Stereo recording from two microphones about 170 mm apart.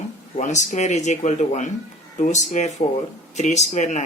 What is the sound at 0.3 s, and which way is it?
Speech, 45° left (ahead or behind).